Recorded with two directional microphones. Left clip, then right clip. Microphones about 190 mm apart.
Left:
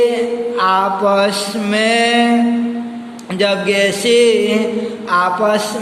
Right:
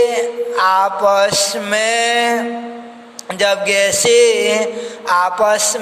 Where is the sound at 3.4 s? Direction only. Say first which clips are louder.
Even; 35° right (ahead or behind).